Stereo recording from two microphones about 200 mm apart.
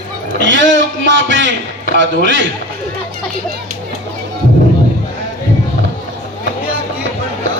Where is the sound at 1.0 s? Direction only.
65° right (ahead or behind).